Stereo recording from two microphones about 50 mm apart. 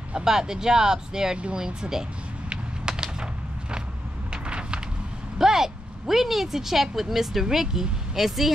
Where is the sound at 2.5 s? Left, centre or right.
Centre.